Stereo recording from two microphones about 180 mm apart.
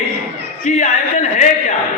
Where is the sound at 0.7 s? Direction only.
40° left (ahead or behind).